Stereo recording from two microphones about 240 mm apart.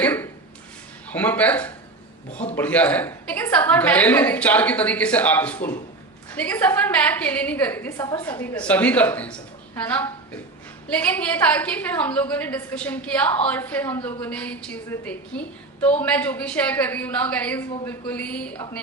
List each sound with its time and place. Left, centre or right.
0.0 s a sound: centre
1.1 s a woman's voice: centre
2.3 s a man's voice: left
2.6 s a woman's voice: centre